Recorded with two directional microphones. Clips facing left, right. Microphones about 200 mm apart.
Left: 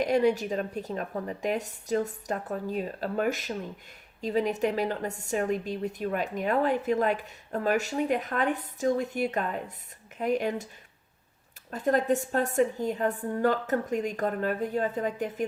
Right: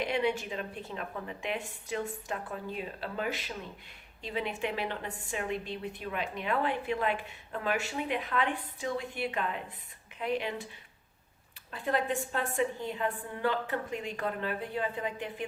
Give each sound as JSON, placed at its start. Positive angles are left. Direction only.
{"t": 0.0, "sound": "a woman's voice", "side_deg": 40}
{"t": 11.7, "sound": "a woman's voice", "side_deg": 45}